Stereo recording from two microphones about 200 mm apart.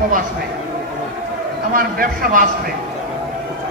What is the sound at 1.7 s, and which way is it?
Speech, 45° right (ahead or behind).